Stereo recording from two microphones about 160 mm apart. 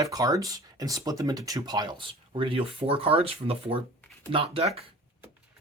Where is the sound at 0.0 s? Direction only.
20° right (ahead or behind); by 4.8 s 40° right (ahead or behind).